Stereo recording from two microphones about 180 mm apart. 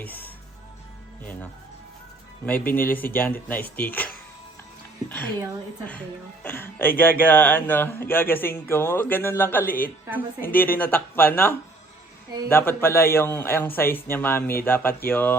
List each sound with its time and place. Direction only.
0.0 s music: 10° left (ahead or behind)
1.2 s a man's voice: 10° left (ahead or behind)
2.5 s a man's voice: 10° left (ahead or behind)
9.6 s speech: 50° left (ahead or behind)
10.5 s a man's voice: 10° left (ahead or behind)